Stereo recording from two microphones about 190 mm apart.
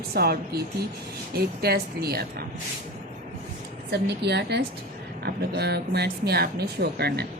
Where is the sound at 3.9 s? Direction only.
60° right (ahead or behind).